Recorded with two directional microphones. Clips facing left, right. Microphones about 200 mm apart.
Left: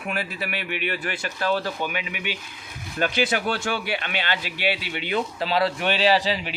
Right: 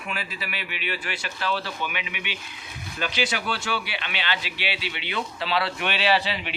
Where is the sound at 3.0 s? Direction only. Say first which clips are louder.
Left 5 dB; 55° left (ahead or behind); by 6.5 s 40° left (ahead or behind).